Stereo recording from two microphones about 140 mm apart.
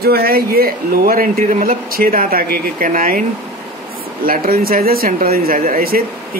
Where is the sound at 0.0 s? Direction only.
90° right.